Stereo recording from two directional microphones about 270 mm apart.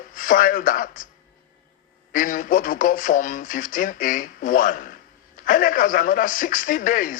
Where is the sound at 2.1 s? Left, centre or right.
Left.